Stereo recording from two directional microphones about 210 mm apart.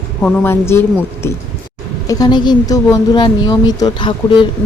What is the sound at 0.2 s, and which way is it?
Speech, 10° left (ahead or behind).